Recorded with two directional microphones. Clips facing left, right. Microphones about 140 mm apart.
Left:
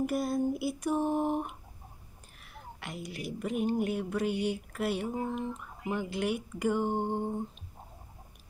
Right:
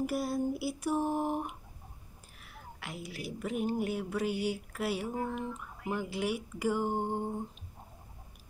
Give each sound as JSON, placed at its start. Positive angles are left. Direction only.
{"t": 0.0, "sound": "speech", "side_deg": -5}
{"t": 2.8, "sound": "speech", "side_deg": -5}
{"t": 5.0, "sound": "speech", "side_deg": 20}
{"t": 5.9, "sound": "speech", "side_deg": -5}